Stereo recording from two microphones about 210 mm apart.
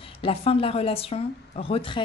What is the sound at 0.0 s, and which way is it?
Speech, 25° left (ahead or behind).